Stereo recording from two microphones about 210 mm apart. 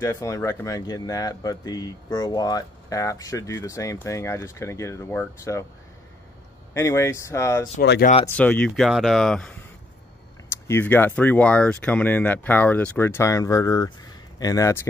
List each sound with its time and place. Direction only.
0.0 s speech: 15° left (ahead or behind)
6.7 s speech: 15° left (ahead or behind)
7.8 s speech: 55° left (ahead or behind)
8.4 s speech: 5° left (ahead or behind)
10.5 s speech: 10° left (ahead or behind)